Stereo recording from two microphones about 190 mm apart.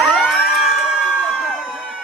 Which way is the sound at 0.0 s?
Centre (ahead or behind).